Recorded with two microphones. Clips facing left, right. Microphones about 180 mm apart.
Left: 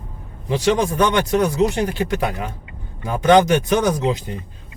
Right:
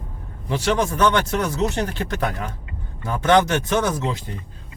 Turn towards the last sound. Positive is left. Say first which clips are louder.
# left 4 dB
turn(degrees=15)  # may be behind; listen again after turning